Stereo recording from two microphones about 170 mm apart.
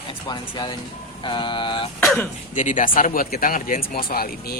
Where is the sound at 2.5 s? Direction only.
50° left (ahead or behind).